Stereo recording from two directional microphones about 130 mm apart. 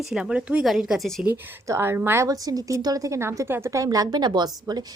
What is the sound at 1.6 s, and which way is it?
A woman's voice, 20° right (ahead or behind).